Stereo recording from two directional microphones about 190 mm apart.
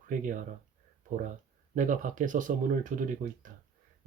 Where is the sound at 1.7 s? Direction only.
40° right (ahead or behind).